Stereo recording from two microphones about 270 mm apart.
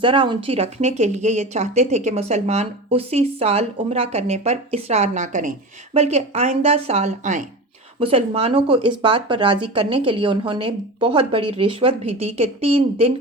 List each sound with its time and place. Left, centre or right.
0.0 s speech: centre